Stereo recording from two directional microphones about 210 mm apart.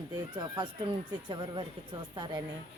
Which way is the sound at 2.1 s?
20° right (ahead or behind).